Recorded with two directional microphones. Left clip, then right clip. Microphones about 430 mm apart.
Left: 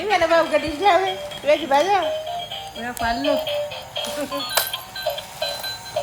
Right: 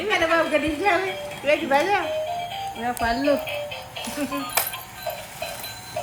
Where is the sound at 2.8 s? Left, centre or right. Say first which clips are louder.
Even; centre.